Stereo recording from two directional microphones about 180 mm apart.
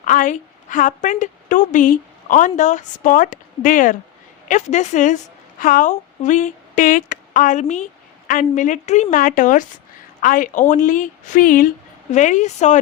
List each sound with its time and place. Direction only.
0.0 s a woman's voice: 45° left (ahead or behind)